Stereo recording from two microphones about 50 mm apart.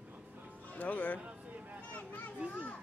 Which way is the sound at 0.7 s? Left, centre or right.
Left.